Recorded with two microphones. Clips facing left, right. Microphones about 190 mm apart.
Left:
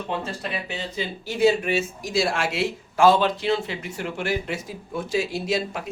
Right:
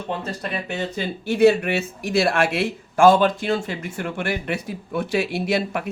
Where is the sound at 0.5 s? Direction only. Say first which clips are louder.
Right 4 dB; 55° right (ahead or behind).